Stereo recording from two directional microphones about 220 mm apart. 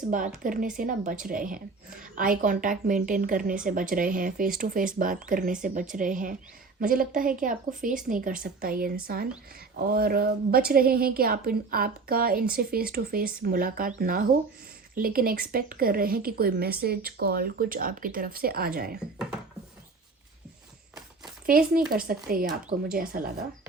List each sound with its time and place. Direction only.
0.4 s a woman's voice: 40° right (ahead or behind)
21.4 s a woman's voice: 40° right (ahead or behind)